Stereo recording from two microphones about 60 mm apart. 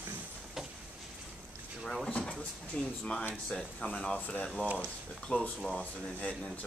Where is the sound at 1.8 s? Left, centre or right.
Centre.